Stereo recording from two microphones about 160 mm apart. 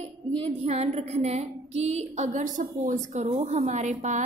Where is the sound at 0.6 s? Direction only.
40° right (ahead or behind).